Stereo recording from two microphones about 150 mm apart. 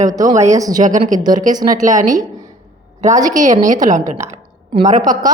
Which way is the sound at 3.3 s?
60° right (ahead or behind).